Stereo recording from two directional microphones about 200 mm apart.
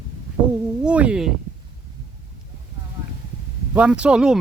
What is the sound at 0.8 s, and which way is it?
Speech, 5° right (ahead or behind).